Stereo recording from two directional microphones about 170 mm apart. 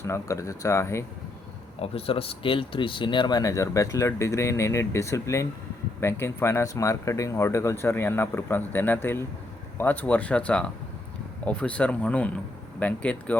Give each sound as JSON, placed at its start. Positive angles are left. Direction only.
{"t": 0.0, "sound": "speech", "side_deg": 15}
{"t": 1.8, "sound": "speech", "side_deg": 35}